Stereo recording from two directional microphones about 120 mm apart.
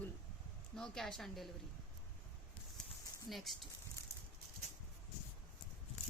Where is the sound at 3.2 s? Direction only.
Centre (ahead or behind).